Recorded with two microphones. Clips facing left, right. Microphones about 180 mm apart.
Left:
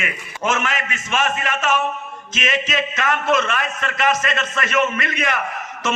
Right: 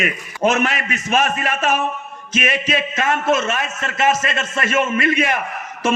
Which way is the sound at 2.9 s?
25° right (ahead or behind).